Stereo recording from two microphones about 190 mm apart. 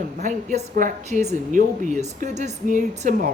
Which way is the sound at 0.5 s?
45° right (ahead or behind).